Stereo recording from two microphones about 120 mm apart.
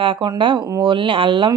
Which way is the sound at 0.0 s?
45° right (ahead or behind).